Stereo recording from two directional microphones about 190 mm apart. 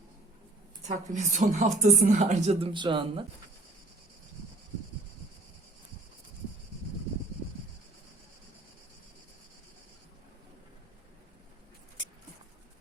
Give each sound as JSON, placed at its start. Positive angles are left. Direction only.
{"t": 0.9, "sound": "a woman's voice", "side_deg": -40}